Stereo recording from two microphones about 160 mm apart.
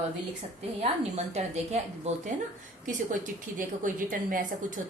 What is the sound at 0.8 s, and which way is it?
A woman's voice, 45° right (ahead or behind).